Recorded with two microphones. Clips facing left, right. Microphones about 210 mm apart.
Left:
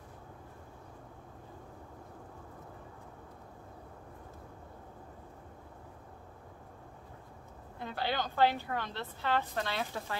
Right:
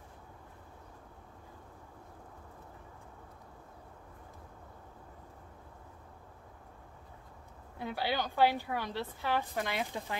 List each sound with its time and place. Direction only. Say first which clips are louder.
7.8 s a woman's voice: right 1 dB; 10° right (ahead or behind)